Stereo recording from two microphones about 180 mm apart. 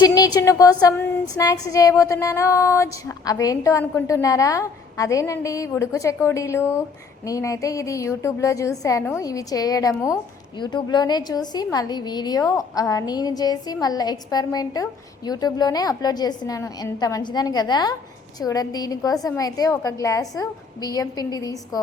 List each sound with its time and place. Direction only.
0.0 s a woman's voice: 20° left (ahead or behind)